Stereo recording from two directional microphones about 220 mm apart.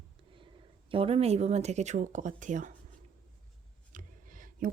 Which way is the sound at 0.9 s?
25° right (ahead or behind).